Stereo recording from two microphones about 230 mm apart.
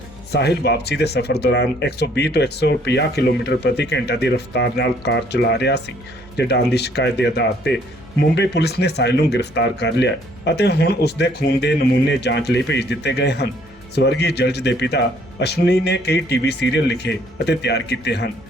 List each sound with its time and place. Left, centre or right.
0.3 s speech: left